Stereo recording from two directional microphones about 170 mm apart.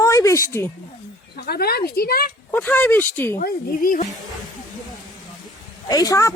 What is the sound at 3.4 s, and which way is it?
Speech, 60° left (ahead or behind).